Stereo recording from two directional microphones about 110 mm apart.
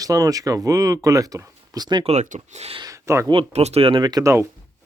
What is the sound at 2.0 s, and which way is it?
Speech, 75° right (ahead or behind).